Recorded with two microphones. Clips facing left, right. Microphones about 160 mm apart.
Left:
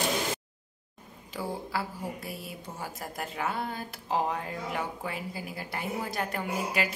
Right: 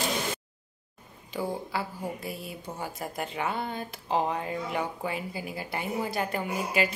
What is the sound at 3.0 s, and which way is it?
Speech, centre (ahead or behind).